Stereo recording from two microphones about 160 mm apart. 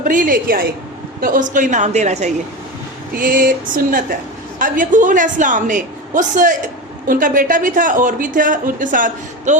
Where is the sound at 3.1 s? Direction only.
60° right (ahead or behind).